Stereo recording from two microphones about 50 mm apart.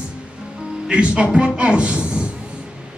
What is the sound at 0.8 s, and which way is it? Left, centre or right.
A man's voice, right.